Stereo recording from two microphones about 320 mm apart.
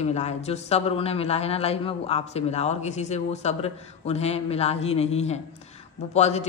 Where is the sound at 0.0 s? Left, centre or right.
Left.